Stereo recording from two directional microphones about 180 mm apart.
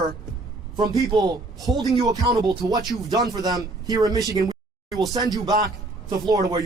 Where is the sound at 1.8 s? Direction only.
20° right (ahead or behind).